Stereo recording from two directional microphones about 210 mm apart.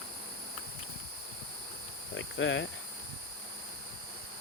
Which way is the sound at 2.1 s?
60° left (ahead or behind).